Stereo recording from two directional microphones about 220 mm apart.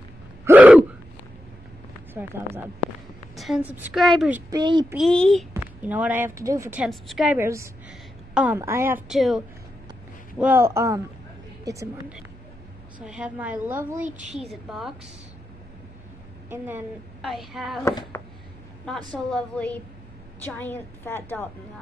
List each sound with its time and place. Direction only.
0.5 s gasp: 5° right (ahead or behind)
2.1 s a woman's voice: 10° right (ahead or behind)
4.5 s a child's voice: 20° right (ahead or behind)
4.9 s a woman's voice: centre (ahead or behind)
10.4 s a woman's voice: 10° right (ahead or behind)
14.0 s a woman's voice: 35° right (ahead or behind)
14.4 s a woman's voice: centre (ahead or behind)
16.4 s a woman's voice: 10° right (ahead or behind)
17.8 s speech: 15° left (ahead or behind)
19.3 s a woman's voice: 5° left (ahead or behind)